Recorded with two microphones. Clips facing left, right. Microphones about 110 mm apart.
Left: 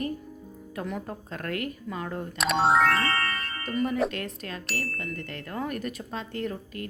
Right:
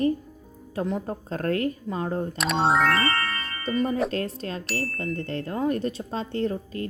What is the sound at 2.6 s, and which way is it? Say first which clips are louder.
Music: right 1 dB; centre (ahead or behind).